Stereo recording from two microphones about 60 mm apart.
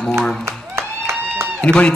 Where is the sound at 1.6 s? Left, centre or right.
Centre.